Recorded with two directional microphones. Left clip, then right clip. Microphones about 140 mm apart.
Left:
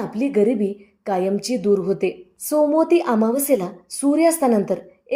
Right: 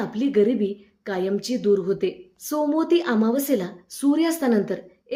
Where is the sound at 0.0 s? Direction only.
15° left (ahead or behind).